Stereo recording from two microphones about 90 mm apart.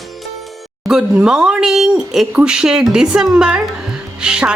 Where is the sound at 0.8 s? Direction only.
5° right (ahead or behind).